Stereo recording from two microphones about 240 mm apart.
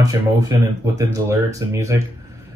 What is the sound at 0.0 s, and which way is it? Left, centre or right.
Speech, centre.